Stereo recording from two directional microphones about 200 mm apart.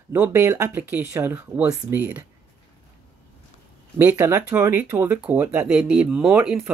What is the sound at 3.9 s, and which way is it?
Speech, 10° right (ahead or behind).